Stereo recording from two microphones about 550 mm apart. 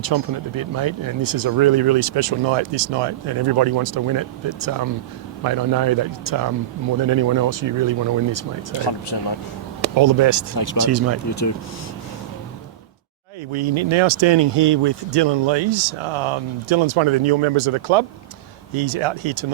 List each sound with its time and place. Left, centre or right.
0.0 s speech: right
8.7 s speech: left
10.0 s speech: right
10.5 s speech: left
10.8 s speech: right
11.3 s speech: left
13.5 s speech: right